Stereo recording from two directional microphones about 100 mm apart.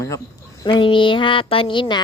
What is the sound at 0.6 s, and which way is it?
Speech, 55° left (ahead or behind).